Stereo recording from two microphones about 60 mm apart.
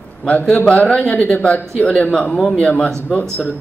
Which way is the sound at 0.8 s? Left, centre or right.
Centre.